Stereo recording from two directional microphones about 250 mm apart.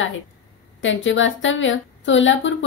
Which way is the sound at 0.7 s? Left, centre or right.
Left.